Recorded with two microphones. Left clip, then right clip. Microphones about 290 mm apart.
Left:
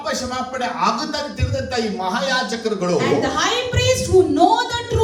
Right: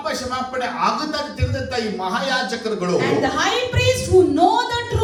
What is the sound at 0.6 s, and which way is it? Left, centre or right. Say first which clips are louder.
A man's voice: left 1 dB; left.